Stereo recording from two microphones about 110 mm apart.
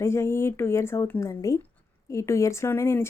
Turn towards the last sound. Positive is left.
turn(degrees=20)  # may be behind; listen again after turning